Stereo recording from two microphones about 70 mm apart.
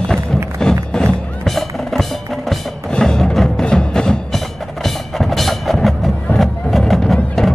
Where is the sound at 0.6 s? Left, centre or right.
Centre.